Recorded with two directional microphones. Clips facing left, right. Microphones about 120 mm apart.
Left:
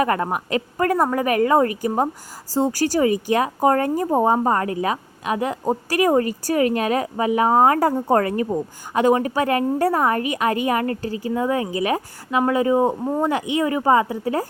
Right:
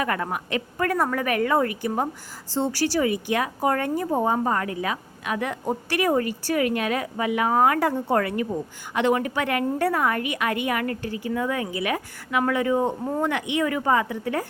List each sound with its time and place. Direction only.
0.0 s a woman's voice: 35° left (ahead or behind); by 13.2 s 20° left (ahead or behind)
13.6 s a woman's voice: 30° left (ahead or behind)